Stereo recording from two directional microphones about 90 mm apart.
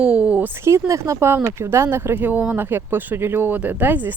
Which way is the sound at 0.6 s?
35° right (ahead or behind).